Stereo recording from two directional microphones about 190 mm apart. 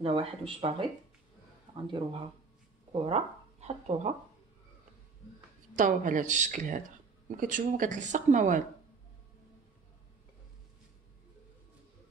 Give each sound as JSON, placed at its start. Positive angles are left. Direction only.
{"t": 0.0, "sound": "speech", "side_deg": -30}
{"t": 5.8, "sound": "speech", "side_deg": -40}